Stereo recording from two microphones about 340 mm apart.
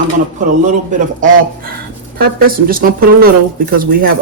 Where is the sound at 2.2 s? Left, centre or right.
Right.